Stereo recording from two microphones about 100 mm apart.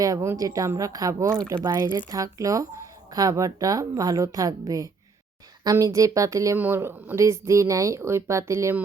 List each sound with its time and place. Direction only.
0.0 s speech: 30° right (ahead or behind)